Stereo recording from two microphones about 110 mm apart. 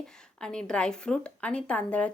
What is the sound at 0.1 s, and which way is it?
A woman's voice, 5° left (ahead or behind).